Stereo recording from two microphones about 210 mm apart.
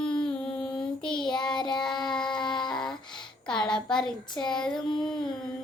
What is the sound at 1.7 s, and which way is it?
Speech, 5° left (ahead or behind).